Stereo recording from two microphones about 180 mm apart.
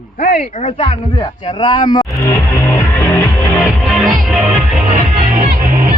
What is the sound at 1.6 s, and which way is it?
Speech, 25° left (ahead or behind).